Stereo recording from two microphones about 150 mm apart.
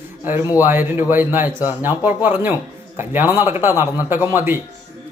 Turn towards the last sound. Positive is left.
turn(degrees=-15)  # may be behind; listen again after turning